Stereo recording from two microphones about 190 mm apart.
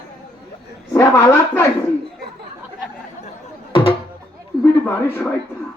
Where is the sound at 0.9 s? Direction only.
15° left (ahead or behind).